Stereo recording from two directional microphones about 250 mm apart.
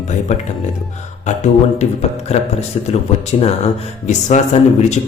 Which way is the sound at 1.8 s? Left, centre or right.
Left.